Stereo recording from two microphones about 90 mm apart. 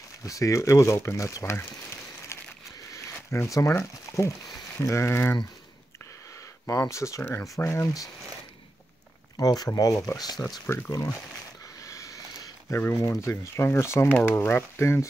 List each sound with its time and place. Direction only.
0.2 s speech: 35° left (ahead or behind)
2.9 s a sound: 30° left (ahead or behind)
4.7 s speech: 30° left (ahead or behind)
6.6 s speech: 35° left (ahead or behind)
9.4 s speech: 45° left (ahead or behind)
10.7 s speech: 30° left (ahead or behind)
11.8 s a sound: 35° left (ahead or behind)
12.9 s speech: 35° left (ahead or behind)